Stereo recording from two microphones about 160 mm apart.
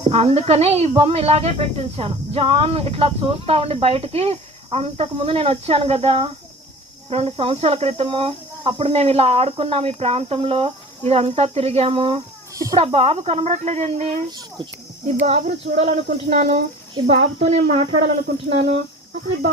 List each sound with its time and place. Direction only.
0.1 s speech: 40° right (ahead or behind)
14.3 s a child's voice: 25° right (ahead or behind)
15.0 s speech: 45° right (ahead or behind)